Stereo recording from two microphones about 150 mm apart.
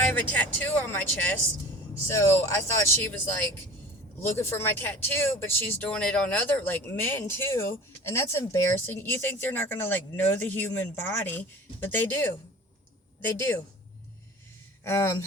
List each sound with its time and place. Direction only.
0.0 s speech: 10° left (ahead or behind)
13.2 s speech: 15° left (ahead or behind)
14.8 s speech: 20° left (ahead or behind)